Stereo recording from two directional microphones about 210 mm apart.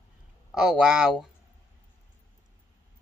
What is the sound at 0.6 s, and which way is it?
Speech, 5° right (ahead or behind).